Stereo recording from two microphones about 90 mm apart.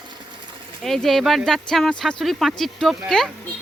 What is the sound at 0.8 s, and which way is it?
Speech, centre (ahead or behind).